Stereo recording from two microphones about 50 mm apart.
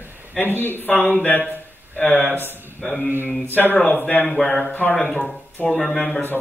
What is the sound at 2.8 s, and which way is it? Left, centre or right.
Speech, centre.